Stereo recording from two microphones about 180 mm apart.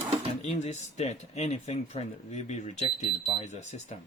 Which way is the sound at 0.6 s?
40° left (ahead or behind).